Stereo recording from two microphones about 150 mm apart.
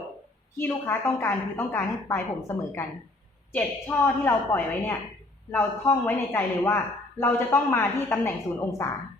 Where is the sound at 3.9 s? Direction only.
10° left (ahead or behind).